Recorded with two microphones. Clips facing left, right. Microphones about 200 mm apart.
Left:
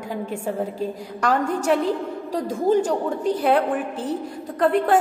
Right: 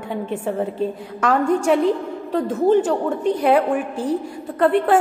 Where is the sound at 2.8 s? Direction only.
10° left (ahead or behind).